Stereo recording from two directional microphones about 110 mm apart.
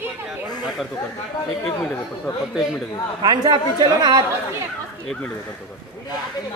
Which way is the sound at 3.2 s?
40° right (ahead or behind).